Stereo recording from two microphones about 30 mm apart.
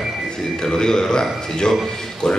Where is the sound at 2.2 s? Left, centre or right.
Left.